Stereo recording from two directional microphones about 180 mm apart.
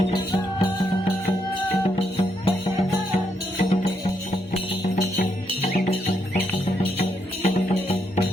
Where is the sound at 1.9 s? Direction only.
30° left (ahead or behind).